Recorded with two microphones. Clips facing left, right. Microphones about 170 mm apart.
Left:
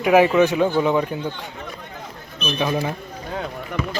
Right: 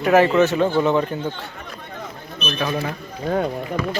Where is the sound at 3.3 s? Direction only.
35° right (ahead or behind).